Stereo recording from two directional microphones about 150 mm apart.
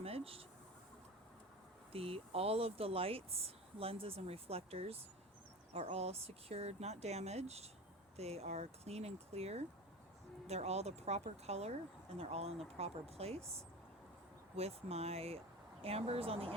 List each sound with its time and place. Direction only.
0.0 s speech: 40° right (ahead or behind)
1.9 s speech: 40° right (ahead or behind)
14.5 s speech: 45° right (ahead or behind)